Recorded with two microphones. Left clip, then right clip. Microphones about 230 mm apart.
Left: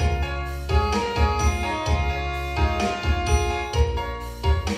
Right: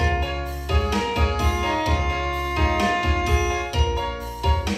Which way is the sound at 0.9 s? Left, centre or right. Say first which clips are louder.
Right 1 dB; right.